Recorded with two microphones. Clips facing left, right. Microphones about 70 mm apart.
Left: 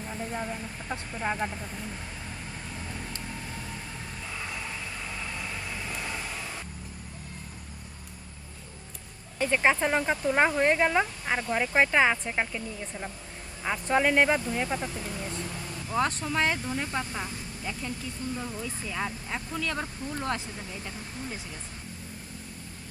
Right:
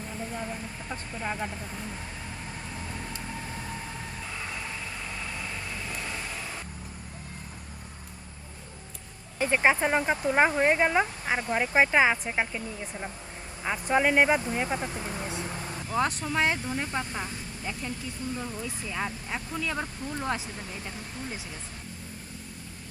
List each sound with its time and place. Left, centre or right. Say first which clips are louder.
0.4 s speech: left 1 dB; centre
1.2 s speech: left 3 dB; left
5.2 s vehicle: even; centre
9.4 s speech: right 1 dB; centre
14.9 s speech: right 1 dB; right
15.4 s vehicle: right 2 dB; right
15.9 s speech: even; centre